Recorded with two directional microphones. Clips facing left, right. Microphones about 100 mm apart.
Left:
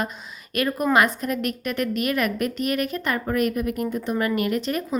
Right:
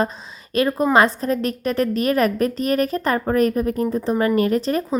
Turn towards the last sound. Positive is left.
turn(degrees=-35)  # may be behind; listen again after turning